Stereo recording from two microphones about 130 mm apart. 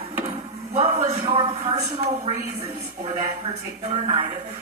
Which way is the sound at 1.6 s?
25° right (ahead or behind).